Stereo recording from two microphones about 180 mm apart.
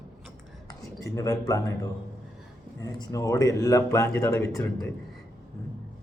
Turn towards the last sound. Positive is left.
turn(degrees=15)  # may be behind; listen again after turning